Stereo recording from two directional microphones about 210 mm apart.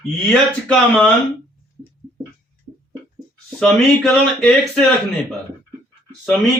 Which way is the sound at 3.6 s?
Centre (ahead or behind).